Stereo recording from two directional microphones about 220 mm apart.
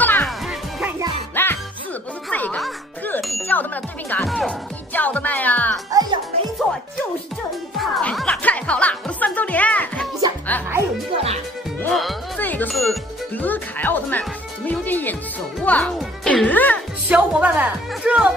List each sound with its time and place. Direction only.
0.0 s music: 10° left (ahead or behind)
0.5 s music: centre (ahead or behind)
1.3 s music: 10° left (ahead or behind)
5.9 s music: 15° right (ahead or behind)
7.7 s music: centre (ahead or behind)
11.8 s music: centre (ahead or behind)
17.1 s music: 5° right (ahead or behind)